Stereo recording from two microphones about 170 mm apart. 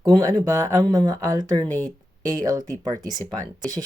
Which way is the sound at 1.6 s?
10° left (ahead or behind).